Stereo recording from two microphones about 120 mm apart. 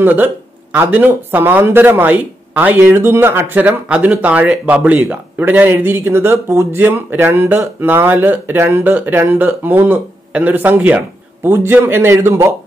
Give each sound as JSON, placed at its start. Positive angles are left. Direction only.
{"t": 0.0, "sound": "speech", "side_deg": -15}